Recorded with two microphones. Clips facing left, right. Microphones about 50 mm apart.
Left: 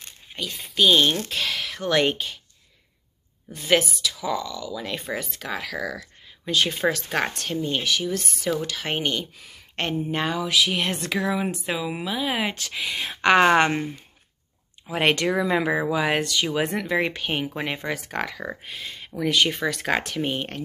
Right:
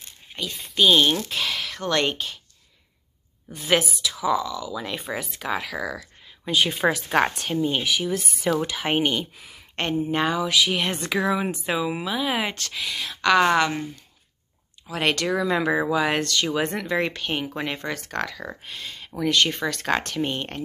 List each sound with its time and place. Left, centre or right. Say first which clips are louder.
0.3 s speech: even; centre
3.5 s speech: left 1 dB; centre
6.5 s speech: right 1 dB; centre; by 13.9 s left
14.9 s speech: left 2 dB; centre